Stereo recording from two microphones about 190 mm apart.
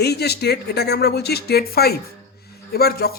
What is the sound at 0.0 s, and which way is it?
Speech, 60° left (ahead or behind).